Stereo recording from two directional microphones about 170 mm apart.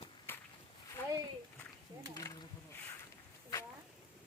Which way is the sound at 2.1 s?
20° left (ahead or behind).